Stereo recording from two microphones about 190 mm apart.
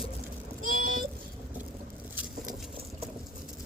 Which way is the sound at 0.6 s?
45° right (ahead or behind).